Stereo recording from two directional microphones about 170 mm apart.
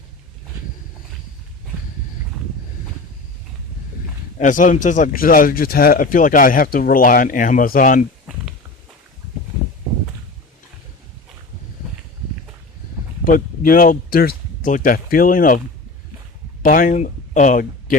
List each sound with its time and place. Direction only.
4.4 s speech: 50° left (ahead or behind)
13.2 s speech: 55° left (ahead or behind)
16.6 s speech: 55° left (ahead or behind)